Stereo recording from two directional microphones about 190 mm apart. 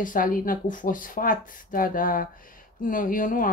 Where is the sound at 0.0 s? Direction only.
45° left (ahead or behind).